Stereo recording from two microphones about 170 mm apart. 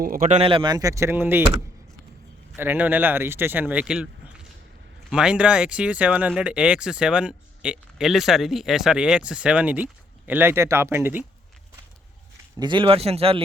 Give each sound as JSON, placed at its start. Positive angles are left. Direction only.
{"t": 0.0, "sound": "speech", "side_deg": -55}
{"t": 2.6, "sound": "speech", "side_deg": -10}
{"t": 12.5, "sound": "a man's voice", "side_deg": -30}